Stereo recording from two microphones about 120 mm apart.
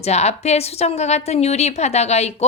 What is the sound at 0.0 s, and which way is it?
A woman's voice, 65° left (ahead or behind).